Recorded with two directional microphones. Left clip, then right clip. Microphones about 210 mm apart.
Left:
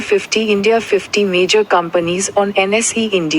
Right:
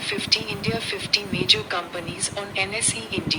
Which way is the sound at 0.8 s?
15° right (ahead or behind).